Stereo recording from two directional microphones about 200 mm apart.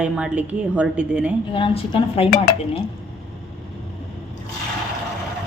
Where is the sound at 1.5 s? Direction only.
25° left (ahead or behind).